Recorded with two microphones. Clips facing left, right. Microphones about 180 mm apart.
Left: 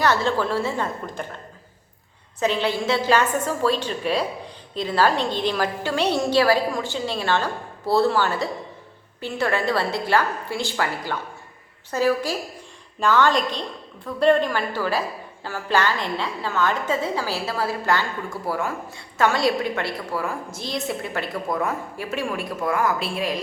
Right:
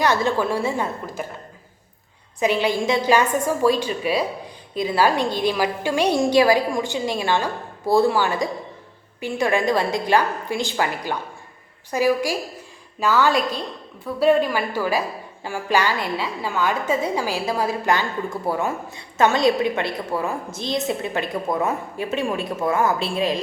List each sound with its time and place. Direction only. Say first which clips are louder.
0.0 s a woman's voice: right 1 dB; 15° right (ahead or behind)
2.4 s a woman's voice: right 2 dB; 10° right (ahead or behind)